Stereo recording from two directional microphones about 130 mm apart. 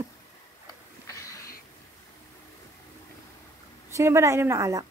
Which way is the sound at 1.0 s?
25° left (ahead or behind).